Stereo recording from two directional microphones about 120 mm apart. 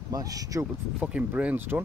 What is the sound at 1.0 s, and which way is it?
Speech, 10° right (ahead or behind).